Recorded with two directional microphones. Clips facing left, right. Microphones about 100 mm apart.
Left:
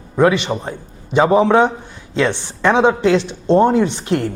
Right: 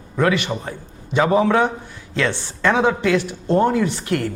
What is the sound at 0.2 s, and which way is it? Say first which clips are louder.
A man's voice: left 5 dB; 20° left (ahead or behind).